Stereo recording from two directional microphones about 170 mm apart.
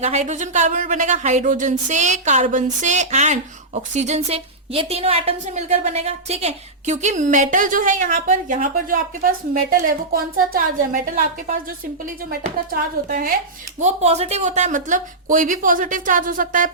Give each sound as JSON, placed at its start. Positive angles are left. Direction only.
{"t": 0.0, "sound": "a woman's voice", "side_deg": -40}
{"t": 10.5, "sound": "a woman's voice", "side_deg": -55}
{"t": 13.7, "sound": "a woman's voice", "side_deg": -40}